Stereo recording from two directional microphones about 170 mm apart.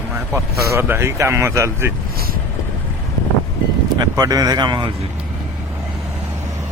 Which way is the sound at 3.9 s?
25° right (ahead or behind).